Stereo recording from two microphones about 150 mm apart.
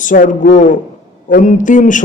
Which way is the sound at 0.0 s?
60° left (ahead or behind).